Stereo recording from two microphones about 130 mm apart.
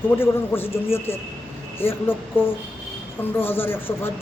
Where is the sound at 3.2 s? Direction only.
15° left (ahead or behind).